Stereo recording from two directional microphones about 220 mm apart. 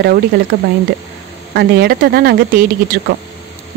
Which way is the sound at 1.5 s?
45° right (ahead or behind).